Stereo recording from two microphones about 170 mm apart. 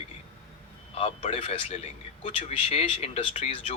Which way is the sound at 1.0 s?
35° left (ahead or behind).